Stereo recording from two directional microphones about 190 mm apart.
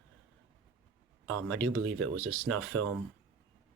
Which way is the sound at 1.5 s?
90° right.